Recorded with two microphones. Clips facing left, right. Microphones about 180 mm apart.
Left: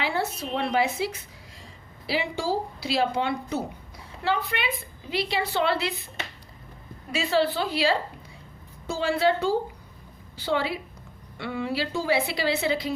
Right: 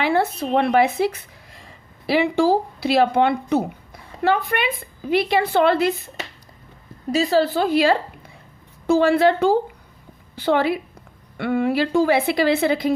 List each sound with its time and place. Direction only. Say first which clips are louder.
0.0 s a woman's voice: right 8 dB; 60° right (ahead or behind)